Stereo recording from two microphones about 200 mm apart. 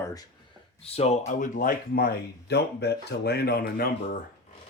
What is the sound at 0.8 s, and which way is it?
Speech, 30° left (ahead or behind).